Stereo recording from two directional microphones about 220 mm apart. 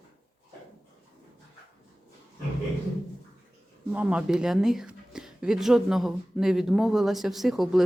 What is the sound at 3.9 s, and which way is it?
A woman's voice, 5° right (ahead or behind).